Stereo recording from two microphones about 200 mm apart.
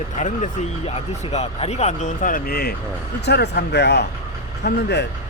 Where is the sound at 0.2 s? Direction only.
35° left (ahead or behind).